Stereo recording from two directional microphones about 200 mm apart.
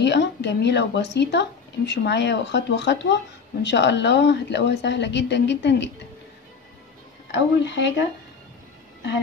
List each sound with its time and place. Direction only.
0.0 s a woman's voice: 60° left (ahead or behind)
7.2 s a woman's voice: 60° left (ahead or behind)